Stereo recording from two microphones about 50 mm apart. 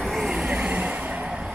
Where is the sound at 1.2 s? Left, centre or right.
Centre.